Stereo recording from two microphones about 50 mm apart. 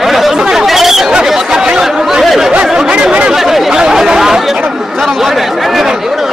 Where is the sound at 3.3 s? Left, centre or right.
Centre.